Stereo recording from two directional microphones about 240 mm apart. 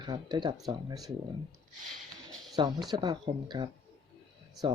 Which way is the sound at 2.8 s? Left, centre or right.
Centre.